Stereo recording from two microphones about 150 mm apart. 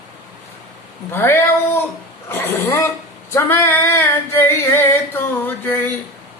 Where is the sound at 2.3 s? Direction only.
15° left (ahead or behind).